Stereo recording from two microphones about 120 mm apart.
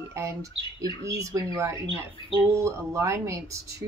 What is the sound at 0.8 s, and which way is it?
A woman's voice, 30° right (ahead or behind).